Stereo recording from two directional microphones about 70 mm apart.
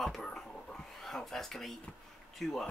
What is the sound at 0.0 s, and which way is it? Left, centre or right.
Whispering, centre.